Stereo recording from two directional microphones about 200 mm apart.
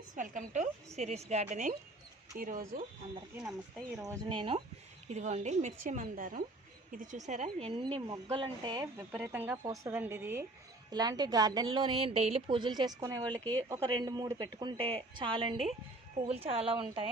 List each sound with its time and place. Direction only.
0.1 s a woman's voice: 40° right (ahead or behind)
3.3 s speech: 5° right (ahead or behind)
4.0 s a woman's voice: 15° right (ahead or behind)
13.2 s speech: 10° left (ahead or behind)
13.7 s a woman's voice: 20° right (ahead or behind)